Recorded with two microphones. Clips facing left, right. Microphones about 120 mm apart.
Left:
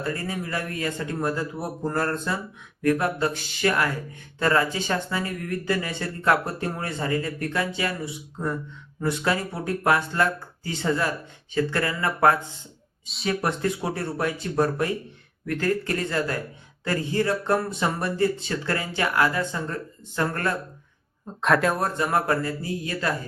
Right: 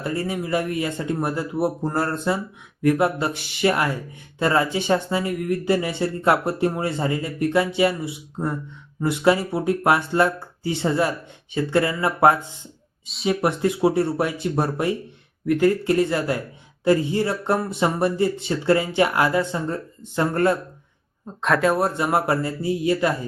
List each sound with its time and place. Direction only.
0.0 s speech: 20° right (ahead or behind)
9.8 s speech: 20° right (ahead or behind)
13.1 s speech: centre (ahead or behind)
13.4 s speech: 25° right (ahead or behind)
21.2 s speech: centre (ahead or behind)
21.8 s speech: 20° right (ahead or behind)